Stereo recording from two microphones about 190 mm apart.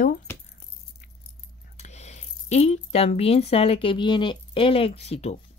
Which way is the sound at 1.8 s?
35° left (ahead or behind).